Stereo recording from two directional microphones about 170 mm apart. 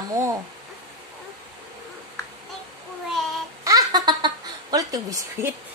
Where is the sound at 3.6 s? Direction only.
20° right (ahead or behind).